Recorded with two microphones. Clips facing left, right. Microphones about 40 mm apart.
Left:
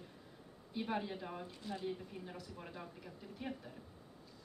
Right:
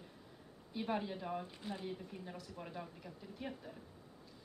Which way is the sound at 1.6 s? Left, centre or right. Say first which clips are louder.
Left 1 dB; centre.